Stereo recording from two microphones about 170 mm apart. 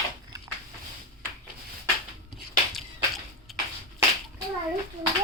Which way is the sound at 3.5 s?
Centre (ahead or behind).